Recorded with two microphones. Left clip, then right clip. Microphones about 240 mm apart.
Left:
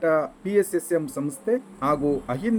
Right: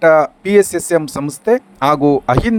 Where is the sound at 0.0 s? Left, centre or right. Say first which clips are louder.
Right 12 dB; right.